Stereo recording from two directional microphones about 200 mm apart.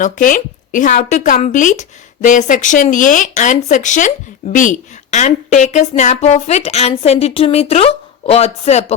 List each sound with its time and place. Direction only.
0.0 s speech: 40° left (ahead or behind)